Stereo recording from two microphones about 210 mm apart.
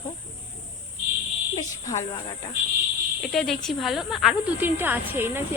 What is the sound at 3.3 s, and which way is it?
Speech, centre (ahead or behind).